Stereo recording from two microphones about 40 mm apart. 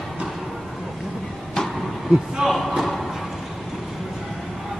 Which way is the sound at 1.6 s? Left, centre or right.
Centre.